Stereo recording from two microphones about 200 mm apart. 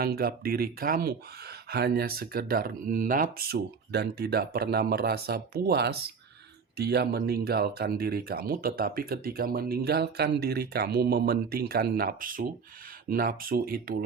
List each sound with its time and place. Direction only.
0.0 s speech: 50° right (ahead or behind)